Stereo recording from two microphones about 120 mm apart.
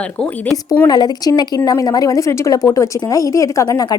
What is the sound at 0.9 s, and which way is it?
A woman's voice, 35° left (ahead or behind).